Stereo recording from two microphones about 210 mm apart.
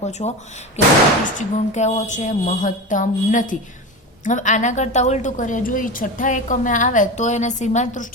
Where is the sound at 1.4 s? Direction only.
35° left (ahead or behind).